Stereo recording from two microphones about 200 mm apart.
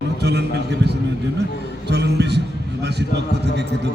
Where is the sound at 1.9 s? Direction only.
55° right (ahead or behind).